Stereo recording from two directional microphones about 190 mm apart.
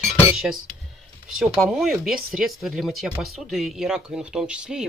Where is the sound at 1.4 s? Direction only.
Centre (ahead or behind).